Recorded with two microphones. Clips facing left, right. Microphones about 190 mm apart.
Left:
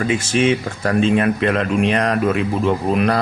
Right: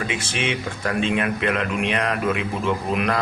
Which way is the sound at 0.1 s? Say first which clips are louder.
Left 9 dB; 40° left (ahead or behind).